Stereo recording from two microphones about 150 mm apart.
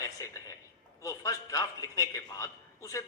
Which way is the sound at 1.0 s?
20° left (ahead or behind).